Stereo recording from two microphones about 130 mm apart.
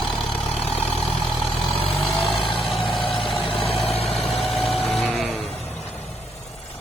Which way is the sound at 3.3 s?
45° left (ahead or behind).